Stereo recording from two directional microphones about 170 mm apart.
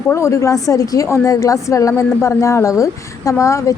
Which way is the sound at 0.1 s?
15° left (ahead or behind).